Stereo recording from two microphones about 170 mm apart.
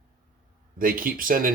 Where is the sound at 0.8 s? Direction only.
55° right (ahead or behind).